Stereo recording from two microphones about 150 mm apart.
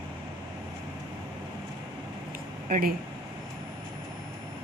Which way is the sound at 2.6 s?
65° right (ahead or behind).